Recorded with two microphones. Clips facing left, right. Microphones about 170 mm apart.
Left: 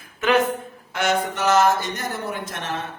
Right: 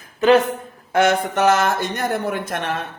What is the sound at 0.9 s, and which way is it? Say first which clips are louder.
Speech: right 6 dB; 55° right (ahead or behind).